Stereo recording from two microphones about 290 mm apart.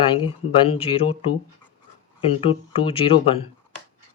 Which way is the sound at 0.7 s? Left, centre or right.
Centre.